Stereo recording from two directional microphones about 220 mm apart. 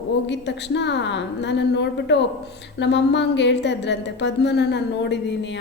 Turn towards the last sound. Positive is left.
turn(degrees=55)  # may be behind; listen again after turning